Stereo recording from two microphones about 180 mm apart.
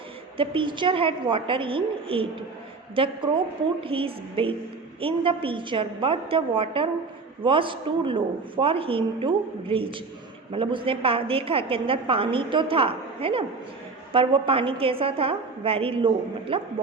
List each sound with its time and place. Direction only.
0.3 s a woman's voice: 30° right (ahead or behind)